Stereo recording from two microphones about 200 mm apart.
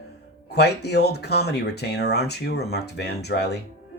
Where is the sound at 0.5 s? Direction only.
55° left (ahead or behind).